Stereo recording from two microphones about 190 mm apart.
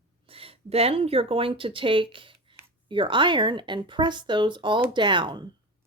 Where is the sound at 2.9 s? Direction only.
25° right (ahead or behind).